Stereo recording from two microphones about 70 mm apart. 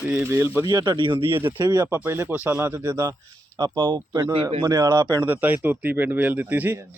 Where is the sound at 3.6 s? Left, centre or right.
Right.